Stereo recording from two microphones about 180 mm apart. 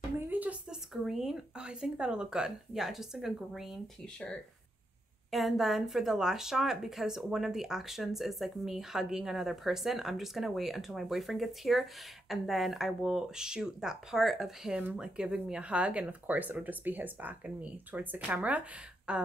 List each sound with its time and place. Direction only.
0.3 s speech: 10° right (ahead or behind)